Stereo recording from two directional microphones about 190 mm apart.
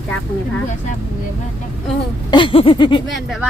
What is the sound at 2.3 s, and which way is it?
Speech, 25° left (ahead or behind).